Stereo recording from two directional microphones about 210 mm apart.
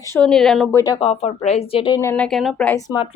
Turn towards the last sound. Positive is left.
turn(degrees=15)  # may be behind; listen again after turning